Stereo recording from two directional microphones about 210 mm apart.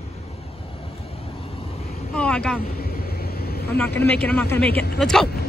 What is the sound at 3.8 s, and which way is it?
Speech, 10° left (ahead or behind).